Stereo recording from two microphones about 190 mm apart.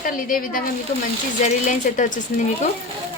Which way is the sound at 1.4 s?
45° left (ahead or behind).